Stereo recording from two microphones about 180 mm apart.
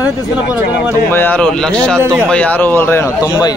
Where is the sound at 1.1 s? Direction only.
10° left (ahead or behind).